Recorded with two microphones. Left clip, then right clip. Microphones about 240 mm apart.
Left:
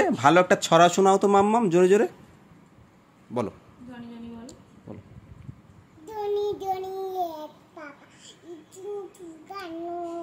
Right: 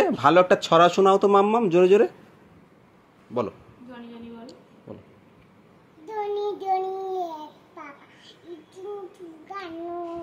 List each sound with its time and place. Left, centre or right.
0.0 s speech: left
6.0 s child singing: centre